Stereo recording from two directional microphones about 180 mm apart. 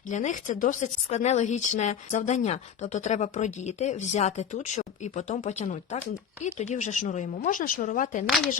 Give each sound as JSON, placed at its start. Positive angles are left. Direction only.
{"t": 0.1, "sound": "a woman's voice", "side_deg": 45}